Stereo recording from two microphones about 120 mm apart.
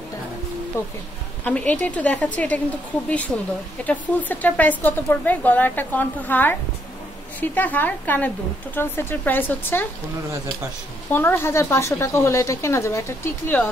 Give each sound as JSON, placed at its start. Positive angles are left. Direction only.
{"t": 0.8, "sound": "a woman's voice", "side_deg": 20}
{"t": 11.1, "sound": "a woman's voice", "side_deg": 15}